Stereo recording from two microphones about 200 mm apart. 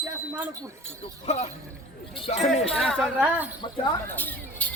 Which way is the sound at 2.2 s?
35° left (ahead or behind).